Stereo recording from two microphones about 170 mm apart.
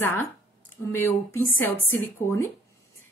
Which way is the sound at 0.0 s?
10° left (ahead or behind).